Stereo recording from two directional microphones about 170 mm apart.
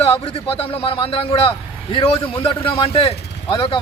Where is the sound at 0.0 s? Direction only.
35° left (ahead or behind).